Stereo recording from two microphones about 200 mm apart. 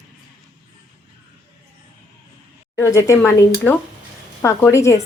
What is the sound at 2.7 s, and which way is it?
Speech, 15° left (ahead or behind).